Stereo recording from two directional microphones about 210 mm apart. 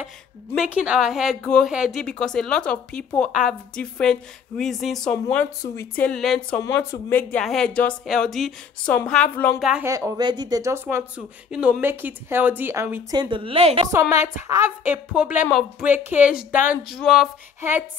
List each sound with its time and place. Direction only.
0.6 s speech: 5° right (ahead or behind)
9.6 s speech: 5° right (ahead or behind)
9.8 s speech: 15° right (ahead or behind)
13.2 s a woman's voice: 25° right (ahead or behind)
13.9 s speech: 15° right (ahead or behind)
17.6 s music: 10° right (ahead or behind)